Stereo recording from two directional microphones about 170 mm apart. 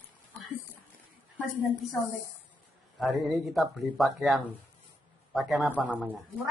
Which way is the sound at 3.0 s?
Centre (ahead or behind).